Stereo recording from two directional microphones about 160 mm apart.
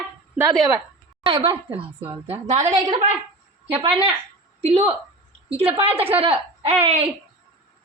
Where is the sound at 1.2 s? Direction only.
30° right (ahead or behind).